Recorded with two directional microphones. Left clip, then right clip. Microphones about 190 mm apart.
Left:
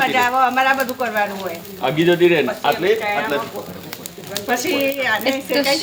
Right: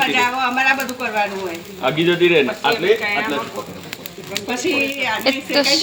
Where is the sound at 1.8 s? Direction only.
20° left (ahead or behind).